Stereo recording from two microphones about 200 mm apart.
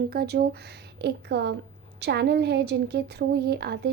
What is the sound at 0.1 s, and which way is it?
A woman's voice, 50° right (ahead or behind).